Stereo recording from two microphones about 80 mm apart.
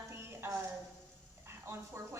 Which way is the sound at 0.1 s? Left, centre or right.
Right.